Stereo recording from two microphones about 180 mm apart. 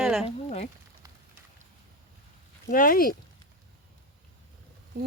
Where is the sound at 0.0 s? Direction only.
Centre (ahead or behind).